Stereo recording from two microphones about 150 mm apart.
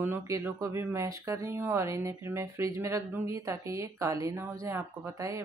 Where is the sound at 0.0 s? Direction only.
15° right (ahead or behind).